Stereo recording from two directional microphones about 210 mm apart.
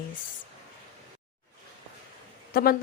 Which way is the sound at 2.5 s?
45° left (ahead or behind).